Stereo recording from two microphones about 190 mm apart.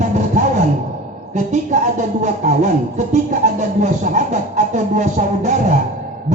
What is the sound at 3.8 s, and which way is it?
Music, 40° right (ahead or behind).